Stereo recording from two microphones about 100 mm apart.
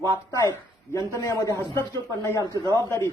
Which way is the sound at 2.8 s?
30° left (ahead or behind).